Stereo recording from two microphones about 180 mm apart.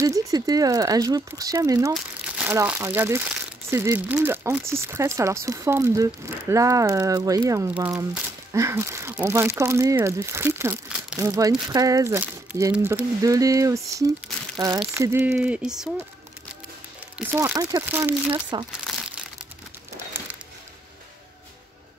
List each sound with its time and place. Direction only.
0.0 s speech: 20° right (ahead or behind)
13.2 s speech: 20° right (ahead or behind)
17.3 s speech: 15° right (ahead or behind)
18.9 s crumpling: 5° right (ahead or behind)